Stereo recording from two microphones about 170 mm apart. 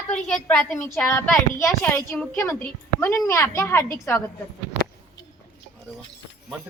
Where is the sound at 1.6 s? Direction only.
15° left (ahead or behind).